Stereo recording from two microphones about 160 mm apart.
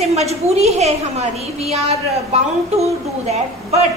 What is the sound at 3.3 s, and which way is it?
Speech, 40° right (ahead or behind).